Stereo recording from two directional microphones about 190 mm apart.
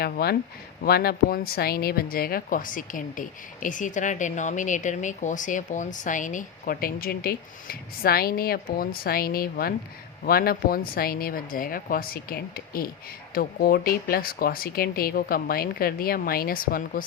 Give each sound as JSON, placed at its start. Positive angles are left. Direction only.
{"t": 0.0, "sound": "speech", "side_deg": 55}